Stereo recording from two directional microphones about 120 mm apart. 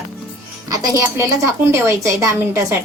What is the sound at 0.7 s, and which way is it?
A woman's voice, 30° right (ahead or behind).